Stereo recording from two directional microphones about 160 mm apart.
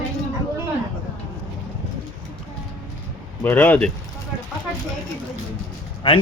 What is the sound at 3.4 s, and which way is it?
Speech, 10° left (ahead or behind).